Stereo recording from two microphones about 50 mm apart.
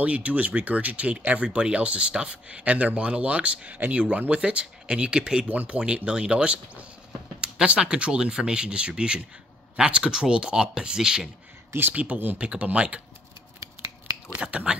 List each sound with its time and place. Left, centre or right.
0.0 s speech: right
5.5 s speech: right; by 11.2 s centre
11.9 s speech: right
14.4 s speech: right